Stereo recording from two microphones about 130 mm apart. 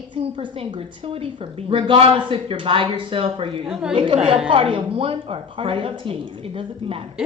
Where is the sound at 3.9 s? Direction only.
40° right (ahead or behind).